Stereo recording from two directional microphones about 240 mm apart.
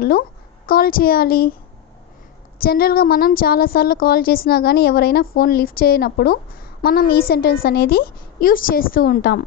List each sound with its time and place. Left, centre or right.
0.7 s a woman's voice: left
2.6 s a woman's voice: left